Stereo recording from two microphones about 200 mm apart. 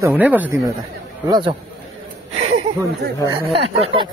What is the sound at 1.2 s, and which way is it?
Speech, 20° right (ahead or behind).